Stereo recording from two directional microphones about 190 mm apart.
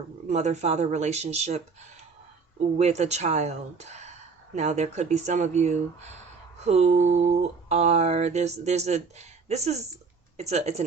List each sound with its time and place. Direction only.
0.3 s speech: 35° right (ahead or behind)
2.7 s speech: 35° right (ahead or behind)